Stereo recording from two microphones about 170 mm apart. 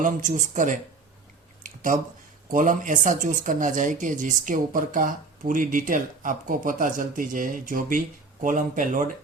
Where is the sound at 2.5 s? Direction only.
50° right (ahead or behind).